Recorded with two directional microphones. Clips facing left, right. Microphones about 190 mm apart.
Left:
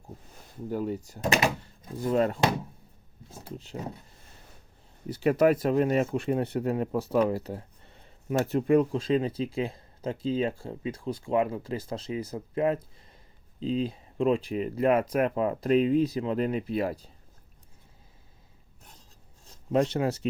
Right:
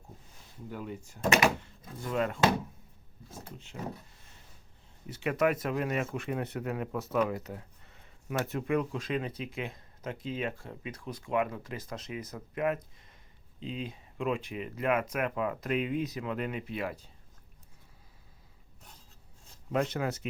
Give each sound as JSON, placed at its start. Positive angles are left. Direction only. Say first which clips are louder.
{"t": 0.3, "sound": "speech", "louder": "left 10 dB", "side_deg": 40}
{"t": 5.0, "sound": "speech", "louder": "left 6 dB", "side_deg": 35}
{"t": 19.7, "sound": "speech", "louder": "left 6 dB", "side_deg": 30}